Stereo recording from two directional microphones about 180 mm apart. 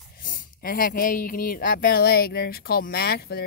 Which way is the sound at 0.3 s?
55° left (ahead or behind).